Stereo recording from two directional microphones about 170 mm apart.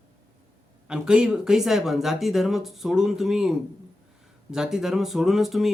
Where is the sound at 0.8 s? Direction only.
5° right (ahead or behind).